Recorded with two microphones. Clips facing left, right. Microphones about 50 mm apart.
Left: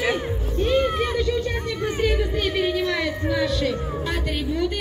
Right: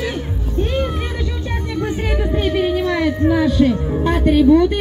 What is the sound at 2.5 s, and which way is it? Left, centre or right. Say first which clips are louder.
Speech: right 6 dB; centre.